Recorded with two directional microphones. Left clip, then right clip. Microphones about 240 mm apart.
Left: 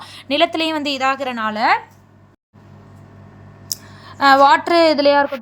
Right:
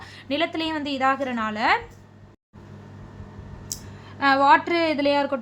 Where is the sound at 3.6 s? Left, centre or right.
Left.